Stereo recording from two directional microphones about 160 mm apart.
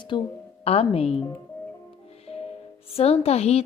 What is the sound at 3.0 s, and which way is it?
Speech, 40° left (ahead or behind).